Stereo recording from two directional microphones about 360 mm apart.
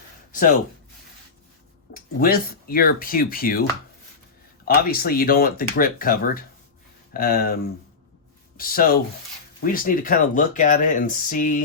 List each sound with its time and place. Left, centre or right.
1.9 s speech: left
4.6 s speech: left